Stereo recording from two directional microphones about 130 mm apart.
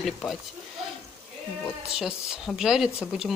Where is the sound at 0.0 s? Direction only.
Centre (ahead or behind).